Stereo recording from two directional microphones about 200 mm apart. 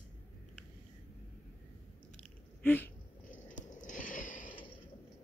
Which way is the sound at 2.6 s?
10° left (ahead or behind).